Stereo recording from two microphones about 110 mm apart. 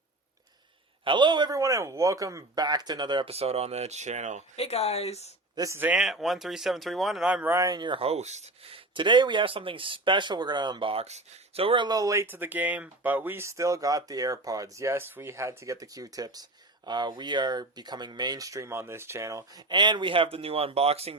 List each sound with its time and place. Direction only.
1.0 s speech: 45° right (ahead or behind)
1.5 s speech: 30° right (ahead or behind)
3.2 s speech: 65° right (ahead or behind); by 4.4 s 90° right
4.5 s speech: 70° left (ahead or behind)
5.5 s speech: 30° right (ahead or behind)
6.0 s speech: centre (ahead or behind)
7.5 s speech: 35° right (ahead or behind)
7.9 s speech: 70° right (ahead or behind); by 11.0 s 50° right (ahead or behind)
11.0 s speech: 80° right; by 19.6 s 30° right (ahead or behind)
19.6 s speech: 45° right (ahead or behind); by 21.2 s 65° right (ahead or behind)